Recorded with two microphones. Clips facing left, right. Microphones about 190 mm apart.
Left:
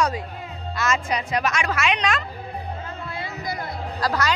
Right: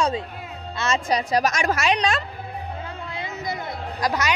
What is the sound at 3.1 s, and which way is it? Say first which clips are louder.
Music: right 1 dB; 20° right (ahead or behind).